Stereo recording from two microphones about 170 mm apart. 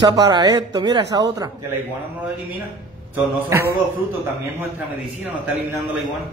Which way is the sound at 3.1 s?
15° right (ahead or behind).